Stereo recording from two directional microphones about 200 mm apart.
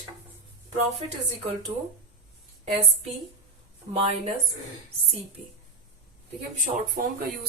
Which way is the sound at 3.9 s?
30° right (ahead or behind).